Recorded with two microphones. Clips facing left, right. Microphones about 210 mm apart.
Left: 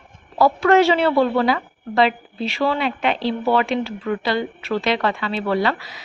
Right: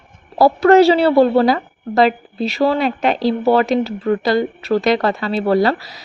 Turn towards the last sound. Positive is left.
turn(degrees=-35)  # may be behind; listen again after turning